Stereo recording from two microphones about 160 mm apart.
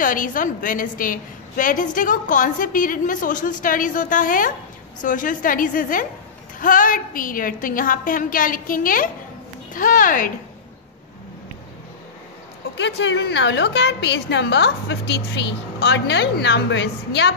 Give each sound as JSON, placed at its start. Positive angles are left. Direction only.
{"t": 0.0, "sound": "a woman's voice", "side_deg": 55}
{"t": 12.7, "sound": "a woman's voice", "side_deg": 90}